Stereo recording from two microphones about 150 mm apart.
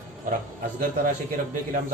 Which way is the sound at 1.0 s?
65° right (ahead or behind).